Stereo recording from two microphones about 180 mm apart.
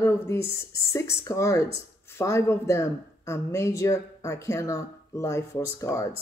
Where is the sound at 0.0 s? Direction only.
15° left (ahead or behind).